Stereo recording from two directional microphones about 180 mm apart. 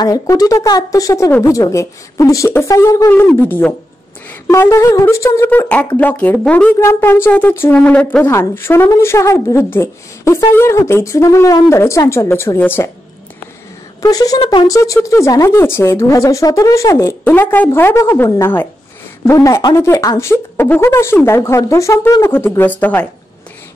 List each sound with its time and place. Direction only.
0.0 s speech: 20° left (ahead or behind)
4.5 s speech: 15° left (ahead or behind)
14.0 s speech: 20° left (ahead or behind)